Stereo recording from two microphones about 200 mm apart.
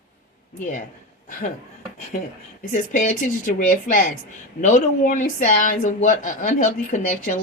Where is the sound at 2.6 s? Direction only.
40° left (ahead or behind).